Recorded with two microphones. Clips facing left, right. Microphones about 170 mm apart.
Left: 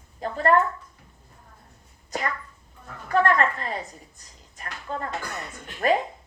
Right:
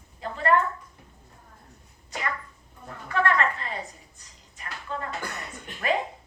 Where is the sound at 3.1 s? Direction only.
45° left (ahead or behind).